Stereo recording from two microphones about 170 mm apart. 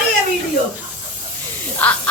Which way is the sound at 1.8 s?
10° left (ahead or behind).